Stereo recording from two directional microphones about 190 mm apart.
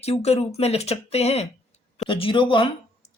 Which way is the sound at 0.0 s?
35° left (ahead or behind).